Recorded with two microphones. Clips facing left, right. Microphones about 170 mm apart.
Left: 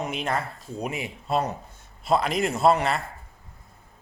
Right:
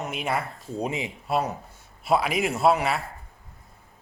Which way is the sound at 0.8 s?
20° right (ahead or behind).